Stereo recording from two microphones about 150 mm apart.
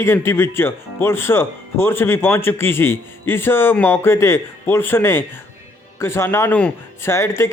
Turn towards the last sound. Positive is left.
turn(degrees=20)  # may be behind; listen again after turning